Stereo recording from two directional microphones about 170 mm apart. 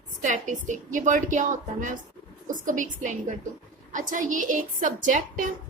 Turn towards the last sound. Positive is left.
turn(degrees=-50)  # may be behind; listen again after turning